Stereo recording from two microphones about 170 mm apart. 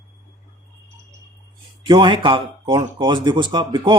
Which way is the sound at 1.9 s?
30° right (ahead or behind).